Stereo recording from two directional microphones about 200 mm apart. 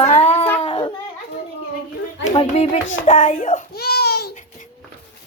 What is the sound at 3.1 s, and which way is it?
Child singing, 40° left (ahead or behind).